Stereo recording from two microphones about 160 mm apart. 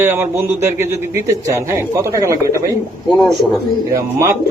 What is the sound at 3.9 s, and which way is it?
Speech, 20° right (ahead or behind).